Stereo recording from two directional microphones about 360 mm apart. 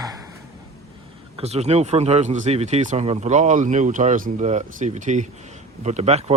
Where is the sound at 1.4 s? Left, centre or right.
Centre.